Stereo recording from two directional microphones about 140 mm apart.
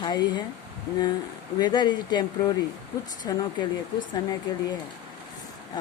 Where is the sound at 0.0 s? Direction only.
30° left (ahead or behind).